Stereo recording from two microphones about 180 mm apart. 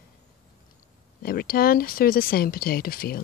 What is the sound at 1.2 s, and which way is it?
Speech, 55° left (ahead or behind).